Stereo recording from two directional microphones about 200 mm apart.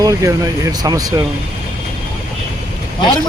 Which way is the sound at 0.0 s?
15° right (ahead or behind).